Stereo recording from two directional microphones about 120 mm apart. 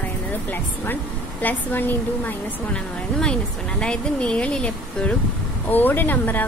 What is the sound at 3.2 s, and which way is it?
Speech, 10° left (ahead or behind).